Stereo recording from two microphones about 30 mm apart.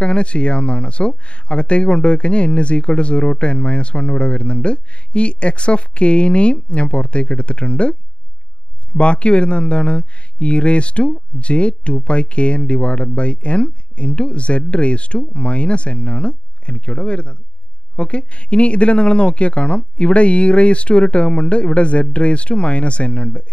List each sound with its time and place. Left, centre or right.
0.0 s speech: left